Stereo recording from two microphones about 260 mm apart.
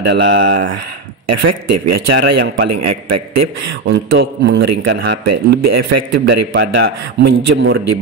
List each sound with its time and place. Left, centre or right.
0.0 s speech: right
1.2 s speech: right
2.0 s speech: right
2.7 s a man's voice: right
3.8 s a man's voice: right
5.2 s a man's voice: right
6.5 s speech: right